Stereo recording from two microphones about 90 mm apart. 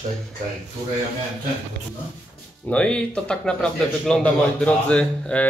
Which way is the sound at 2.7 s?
10° left (ahead or behind).